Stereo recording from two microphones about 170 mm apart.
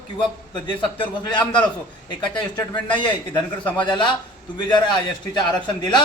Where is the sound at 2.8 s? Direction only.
30° left (ahead or behind).